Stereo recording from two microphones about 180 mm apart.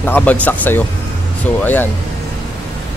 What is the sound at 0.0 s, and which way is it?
Speech, 10° left (ahead or behind).